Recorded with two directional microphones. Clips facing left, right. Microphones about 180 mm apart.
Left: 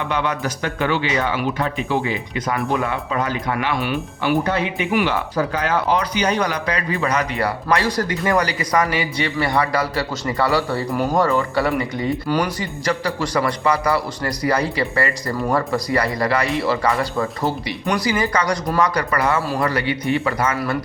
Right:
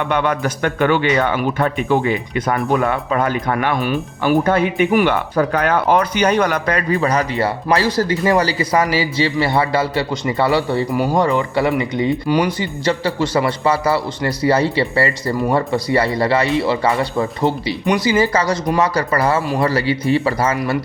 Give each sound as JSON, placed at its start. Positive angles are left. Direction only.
{"t": 0.0, "sound": "speech", "side_deg": -55}
{"t": 6.9, "sound": "a man's voice", "side_deg": -35}